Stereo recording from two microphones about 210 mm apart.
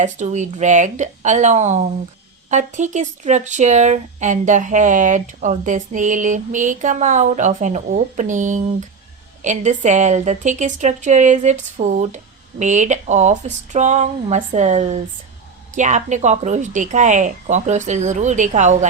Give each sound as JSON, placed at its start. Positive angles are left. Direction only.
{"t": 0.0, "sound": "speech", "side_deg": -35}